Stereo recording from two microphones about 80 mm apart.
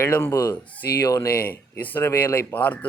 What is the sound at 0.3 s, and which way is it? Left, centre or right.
A man's voice, left.